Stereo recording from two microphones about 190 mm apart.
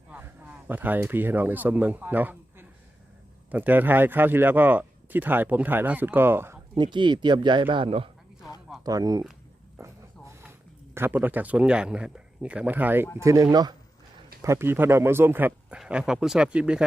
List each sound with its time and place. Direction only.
0.1 s speech: 10° right (ahead or behind)
6.7 s speech: 25° right (ahead or behind)
9.7 s a sound: 15° right (ahead or behind)
10.9 s speech: 10° right (ahead or behind)